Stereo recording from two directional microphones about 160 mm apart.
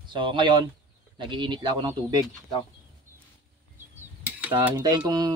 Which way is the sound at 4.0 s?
10° right (ahead or behind).